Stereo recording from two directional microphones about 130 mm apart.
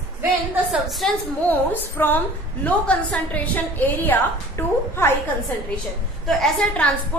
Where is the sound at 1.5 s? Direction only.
15° left (ahead or behind).